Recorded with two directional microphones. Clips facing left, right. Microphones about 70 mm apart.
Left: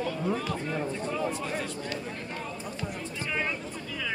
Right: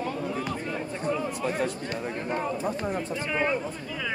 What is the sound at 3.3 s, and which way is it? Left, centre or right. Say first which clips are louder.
Speech: right 5 dB; centre.